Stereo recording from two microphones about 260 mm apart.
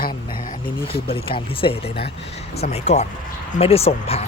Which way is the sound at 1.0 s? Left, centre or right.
Left.